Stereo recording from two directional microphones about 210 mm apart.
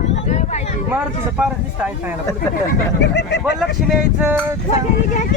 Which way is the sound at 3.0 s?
55° left (ahead or behind).